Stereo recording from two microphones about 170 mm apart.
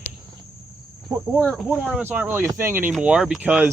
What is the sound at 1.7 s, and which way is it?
Speech, 10° right (ahead or behind).